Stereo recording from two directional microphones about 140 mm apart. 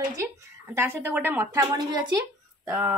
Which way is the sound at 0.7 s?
15° right (ahead or behind).